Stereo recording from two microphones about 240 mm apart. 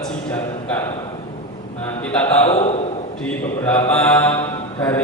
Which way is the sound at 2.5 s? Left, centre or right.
Left.